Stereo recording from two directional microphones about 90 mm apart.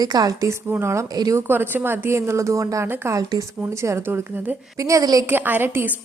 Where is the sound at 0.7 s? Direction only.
30° right (ahead or behind).